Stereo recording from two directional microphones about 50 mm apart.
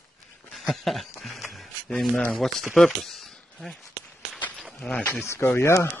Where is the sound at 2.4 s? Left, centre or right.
Centre.